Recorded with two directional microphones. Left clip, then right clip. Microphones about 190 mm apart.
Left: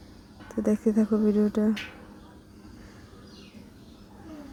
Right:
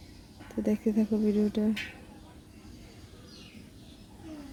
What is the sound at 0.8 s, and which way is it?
Speech, 45° left (ahead or behind).